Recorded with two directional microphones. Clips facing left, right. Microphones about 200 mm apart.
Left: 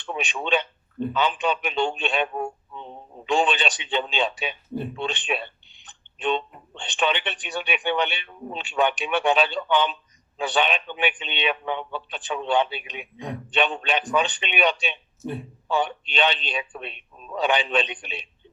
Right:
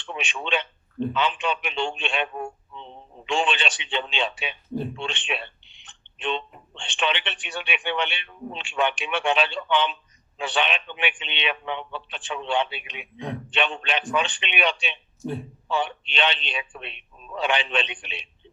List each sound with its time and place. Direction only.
0.2 s a man's voice: 40° left (ahead or behind)
6.8 s a man's voice: 40° left (ahead or behind)
15.2 s a man's voice: centre (ahead or behind)
15.7 s a man's voice: 40° left (ahead or behind)